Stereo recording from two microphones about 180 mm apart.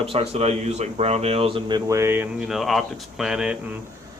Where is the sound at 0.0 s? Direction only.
30° right (ahead or behind); by 2.2 s 15° right (ahead or behind).